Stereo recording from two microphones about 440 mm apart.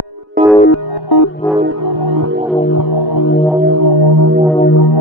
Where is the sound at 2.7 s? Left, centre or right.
Left.